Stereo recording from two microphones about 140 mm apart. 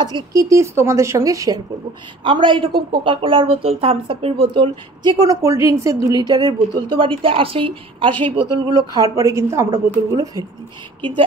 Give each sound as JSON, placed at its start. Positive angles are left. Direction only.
{"t": 0.0, "sound": "a woman's voice", "side_deg": -25}
{"t": 2.2, "sound": "a woman's voice", "side_deg": -35}